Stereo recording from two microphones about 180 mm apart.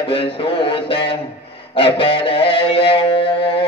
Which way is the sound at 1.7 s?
30° left (ahead or behind).